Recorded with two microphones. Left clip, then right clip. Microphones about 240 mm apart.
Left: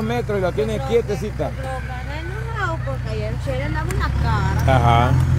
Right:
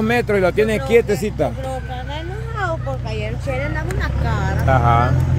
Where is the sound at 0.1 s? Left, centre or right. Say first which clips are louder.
Right 5 dB; right.